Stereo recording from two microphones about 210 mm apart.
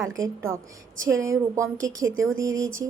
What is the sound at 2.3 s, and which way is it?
Speech, 15° right (ahead or behind).